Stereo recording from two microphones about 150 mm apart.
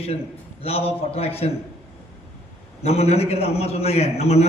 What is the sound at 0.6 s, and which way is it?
Speech, 40° left (ahead or behind).